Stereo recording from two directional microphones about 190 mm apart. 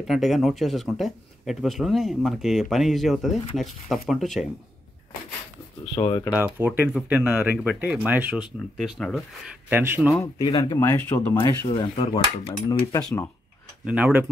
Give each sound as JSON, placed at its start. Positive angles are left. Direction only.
{"t": 0.0, "sound": "speech", "side_deg": 0}
{"t": 5.9, "sound": "cutlery", "side_deg": 25}
{"t": 6.3, "sound": "speech", "side_deg": -10}
{"t": 9.7, "sound": "speech", "side_deg": -10}
{"t": 10.1, "sound": "speech", "side_deg": 15}
{"t": 11.7, "sound": "cutlery", "side_deg": 25}
{"t": 13.8, "sound": "speech", "side_deg": -5}